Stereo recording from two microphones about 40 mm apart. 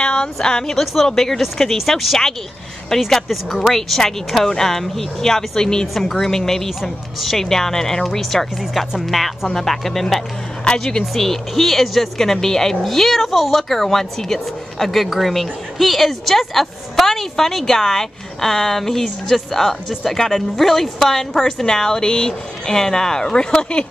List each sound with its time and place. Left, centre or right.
0.0 s a sound: left
1.0 s a woman's voice: centre
1.8 s a woman's voice: centre
6.8 s speech: centre
7.3 s a woman's voice: centre
10.6 s a woman's voice: left